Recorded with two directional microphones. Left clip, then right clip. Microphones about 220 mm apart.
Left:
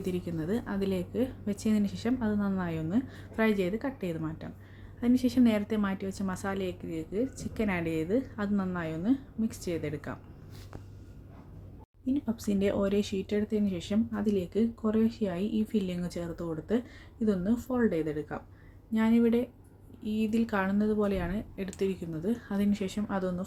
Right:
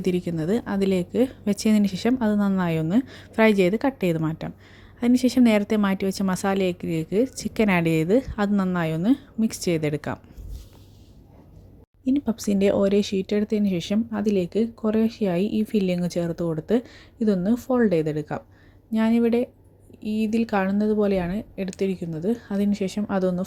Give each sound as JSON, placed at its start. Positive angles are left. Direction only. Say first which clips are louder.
{"t": 0.0, "sound": "a woman's voice", "louder": "right 9 dB", "side_deg": -30}
{"t": 12.0, "sound": "speech", "louder": "right 8 dB", "side_deg": -30}